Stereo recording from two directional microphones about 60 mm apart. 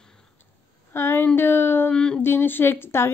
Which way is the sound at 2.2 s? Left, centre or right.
Left.